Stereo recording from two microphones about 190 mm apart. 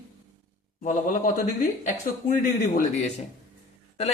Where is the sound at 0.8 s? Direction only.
40° left (ahead or behind).